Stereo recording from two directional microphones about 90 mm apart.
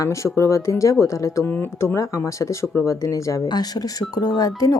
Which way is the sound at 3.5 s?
50° left (ahead or behind).